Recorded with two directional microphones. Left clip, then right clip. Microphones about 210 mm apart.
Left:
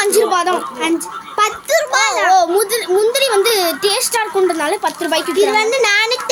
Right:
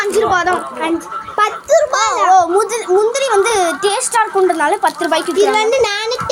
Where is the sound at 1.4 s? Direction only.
25° left (ahead or behind).